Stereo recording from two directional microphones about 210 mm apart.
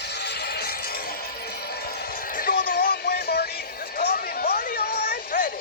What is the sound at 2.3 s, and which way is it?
Music, 45° left (ahead or behind).